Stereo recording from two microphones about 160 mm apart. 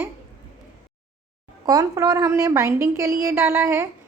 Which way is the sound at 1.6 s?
20° right (ahead or behind).